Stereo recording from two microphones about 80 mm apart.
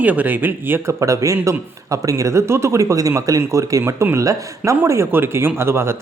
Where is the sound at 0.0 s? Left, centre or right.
Right.